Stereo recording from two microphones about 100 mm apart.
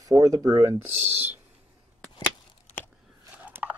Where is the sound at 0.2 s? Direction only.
35° right (ahead or behind).